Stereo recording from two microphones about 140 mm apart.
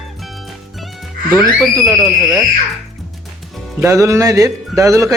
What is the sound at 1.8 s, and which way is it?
Speech, centre (ahead or behind).